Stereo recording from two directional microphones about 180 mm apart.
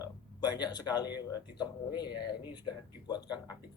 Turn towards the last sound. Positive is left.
turn(degrees=25)  # may be behind; listen again after turning